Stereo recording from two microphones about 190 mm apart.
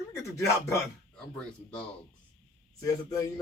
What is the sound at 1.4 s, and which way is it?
Speech, 5° left (ahead or behind).